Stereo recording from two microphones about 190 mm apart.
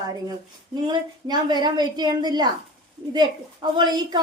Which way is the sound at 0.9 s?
20° right (ahead or behind).